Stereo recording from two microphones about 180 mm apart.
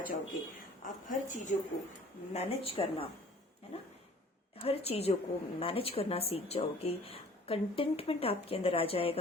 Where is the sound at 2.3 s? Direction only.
35° left (ahead or behind).